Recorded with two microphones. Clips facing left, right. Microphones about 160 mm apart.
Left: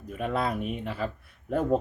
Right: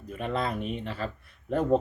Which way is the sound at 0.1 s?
5° left (ahead or behind).